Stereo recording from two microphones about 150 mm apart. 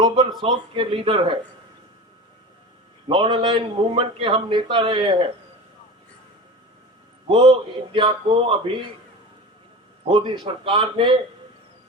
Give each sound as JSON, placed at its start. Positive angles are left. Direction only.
{"t": 0.4, "sound": "a man's voice", "side_deg": -35}
{"t": 3.1, "sound": "a man's voice", "side_deg": -30}
{"t": 7.3, "sound": "a man's voice", "side_deg": -30}
{"t": 10.1, "sound": "a man's voice", "side_deg": -35}